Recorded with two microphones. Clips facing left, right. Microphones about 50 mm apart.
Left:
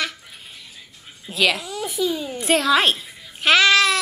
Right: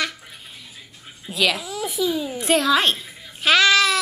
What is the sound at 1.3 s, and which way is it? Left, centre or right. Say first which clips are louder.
Speech: left 1 dB; centre.